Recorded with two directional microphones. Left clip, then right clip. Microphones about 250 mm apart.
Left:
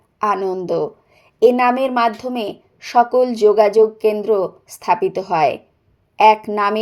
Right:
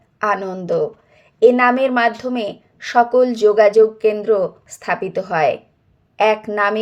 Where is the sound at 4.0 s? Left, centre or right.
Left.